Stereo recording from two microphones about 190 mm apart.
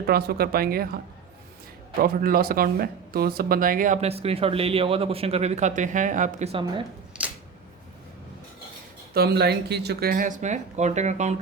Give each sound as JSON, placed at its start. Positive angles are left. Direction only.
{"t": 0.0, "sound": "speech", "side_deg": -55}
{"t": 2.0, "sound": "speech", "side_deg": -50}
{"t": 7.1, "sound": "a sound", "side_deg": -5}
{"t": 9.1, "sound": "speech", "side_deg": -55}